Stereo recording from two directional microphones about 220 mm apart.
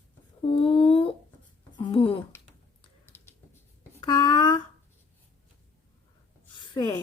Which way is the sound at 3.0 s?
10° left (ahead or behind).